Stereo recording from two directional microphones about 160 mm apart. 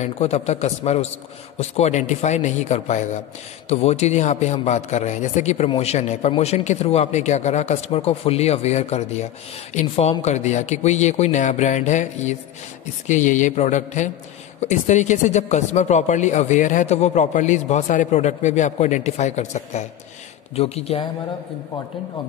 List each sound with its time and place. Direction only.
0.0 s speech: 45° left (ahead or behind)